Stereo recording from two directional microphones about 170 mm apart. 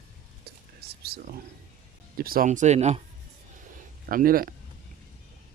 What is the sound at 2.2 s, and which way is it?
Speech, 60° right (ahead or behind).